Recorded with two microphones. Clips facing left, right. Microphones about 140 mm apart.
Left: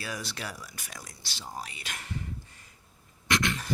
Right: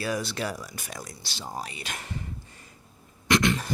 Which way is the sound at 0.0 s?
30° right (ahead or behind).